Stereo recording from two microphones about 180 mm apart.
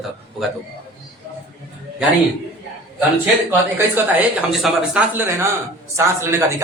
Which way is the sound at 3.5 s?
10° right (ahead or behind).